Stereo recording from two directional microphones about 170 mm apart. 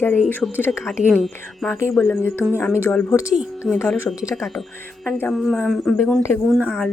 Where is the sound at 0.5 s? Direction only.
10° left (ahead or behind).